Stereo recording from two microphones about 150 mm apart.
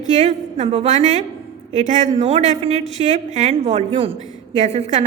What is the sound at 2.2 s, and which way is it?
A woman's voice, 45° right (ahead or behind).